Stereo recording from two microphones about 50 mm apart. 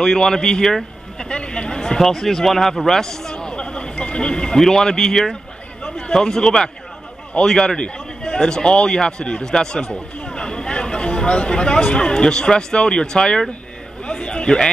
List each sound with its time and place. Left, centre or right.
0.0 s a man's voice: centre
2.0 s a man's voice: centre
14.0 s a sound: centre